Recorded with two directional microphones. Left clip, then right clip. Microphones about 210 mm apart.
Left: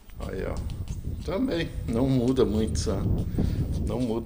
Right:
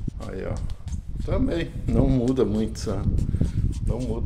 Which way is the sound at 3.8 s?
5° left (ahead or behind).